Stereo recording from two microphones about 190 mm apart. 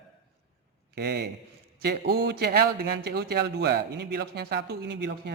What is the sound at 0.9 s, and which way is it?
A man's voice, 55° right (ahead or behind).